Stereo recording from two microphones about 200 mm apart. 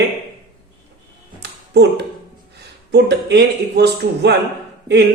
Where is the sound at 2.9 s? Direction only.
55° right (ahead or behind).